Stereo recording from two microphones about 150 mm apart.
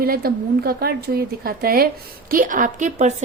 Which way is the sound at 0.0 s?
85° right.